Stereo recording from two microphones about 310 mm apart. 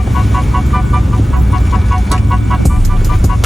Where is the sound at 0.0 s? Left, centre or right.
Centre.